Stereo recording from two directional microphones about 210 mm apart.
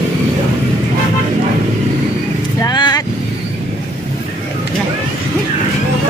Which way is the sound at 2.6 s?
20° left (ahead or behind).